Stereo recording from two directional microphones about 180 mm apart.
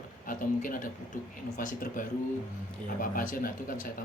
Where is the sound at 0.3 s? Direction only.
50° left (ahead or behind).